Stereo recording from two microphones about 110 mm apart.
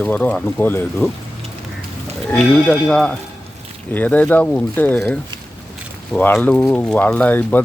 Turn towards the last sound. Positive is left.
turn(degrees=15)  # may be behind; listen again after turning